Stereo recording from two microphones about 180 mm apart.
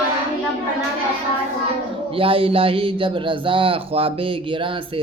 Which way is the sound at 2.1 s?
30° right (ahead or behind).